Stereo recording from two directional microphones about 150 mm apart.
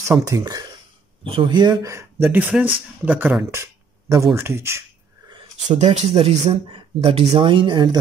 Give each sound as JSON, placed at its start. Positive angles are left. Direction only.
{"t": 0.3, "sound": "speech", "side_deg": -25}
{"t": 1.2, "sound": "speech", "side_deg": -35}
{"t": 3.5, "sound": "a sound", "side_deg": -20}
{"t": 4.4, "sound": "speech", "side_deg": -15}
{"t": 5.7, "sound": "speech", "side_deg": -45}